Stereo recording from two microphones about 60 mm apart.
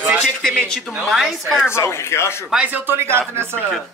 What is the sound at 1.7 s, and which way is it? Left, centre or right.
Speech, left.